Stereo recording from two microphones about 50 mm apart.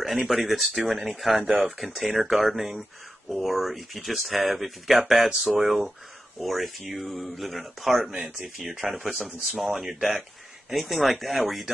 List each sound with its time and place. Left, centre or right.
0.0 s speech: centre